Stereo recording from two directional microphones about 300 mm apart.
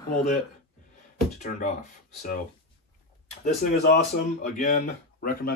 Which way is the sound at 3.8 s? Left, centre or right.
Left.